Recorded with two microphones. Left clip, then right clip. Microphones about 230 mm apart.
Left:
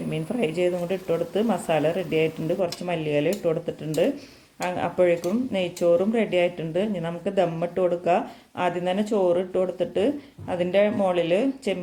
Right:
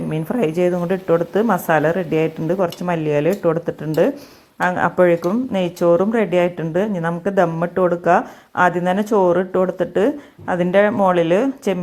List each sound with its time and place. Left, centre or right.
0.1 s speech: right